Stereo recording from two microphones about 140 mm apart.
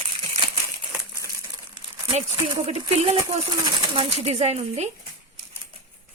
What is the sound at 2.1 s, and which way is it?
A woman's voice, 45° right (ahead or behind).